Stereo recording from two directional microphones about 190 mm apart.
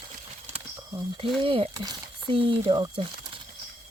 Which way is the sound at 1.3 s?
30° right (ahead or behind).